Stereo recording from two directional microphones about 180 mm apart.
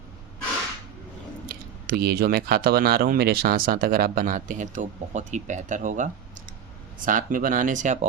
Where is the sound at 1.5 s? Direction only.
55° right (ahead or behind).